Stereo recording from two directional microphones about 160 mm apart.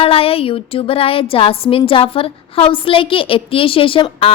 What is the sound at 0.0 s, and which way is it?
A woman's voice, 35° left (ahead or behind).